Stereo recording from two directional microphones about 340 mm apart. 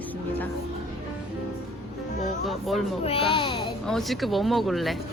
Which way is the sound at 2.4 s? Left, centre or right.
Centre.